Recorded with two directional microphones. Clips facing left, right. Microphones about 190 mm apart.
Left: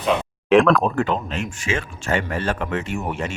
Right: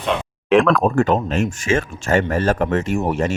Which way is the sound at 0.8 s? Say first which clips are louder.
Right 5 dB; 45° right (ahead or behind).